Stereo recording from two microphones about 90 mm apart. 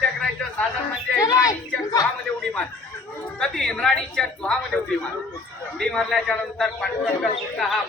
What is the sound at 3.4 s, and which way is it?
A woman's voice, 5° left (ahead or behind).